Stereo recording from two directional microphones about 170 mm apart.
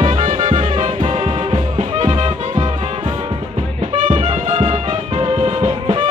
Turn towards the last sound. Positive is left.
turn(degrees=-35)  # may be behind; listen again after turning